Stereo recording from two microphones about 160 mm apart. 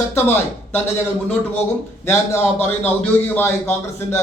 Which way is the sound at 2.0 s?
15° left (ahead or behind).